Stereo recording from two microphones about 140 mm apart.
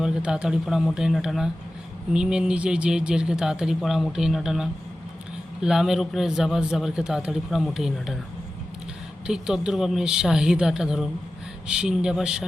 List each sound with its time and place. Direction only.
0.0 s speech: 5° right (ahead or behind)
9.2 s speech: 5° right (ahead or behind)